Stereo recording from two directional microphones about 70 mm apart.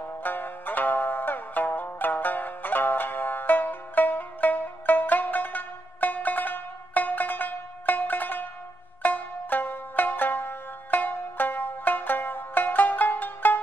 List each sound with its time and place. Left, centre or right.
0.2 s music: left